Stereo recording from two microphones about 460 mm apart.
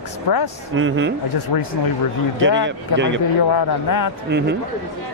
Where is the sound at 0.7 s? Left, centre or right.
Right.